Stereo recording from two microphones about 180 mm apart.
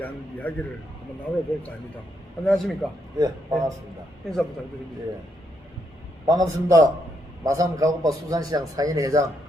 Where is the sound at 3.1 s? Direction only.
20° right (ahead or behind).